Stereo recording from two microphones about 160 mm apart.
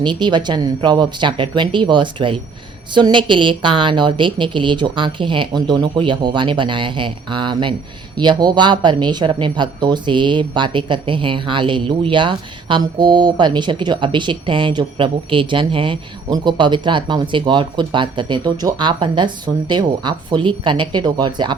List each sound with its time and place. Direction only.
0.0 s a woman's voice: 30° right (ahead or behind)